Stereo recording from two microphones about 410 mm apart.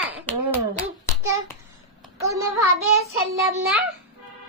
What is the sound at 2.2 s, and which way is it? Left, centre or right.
Speech, centre.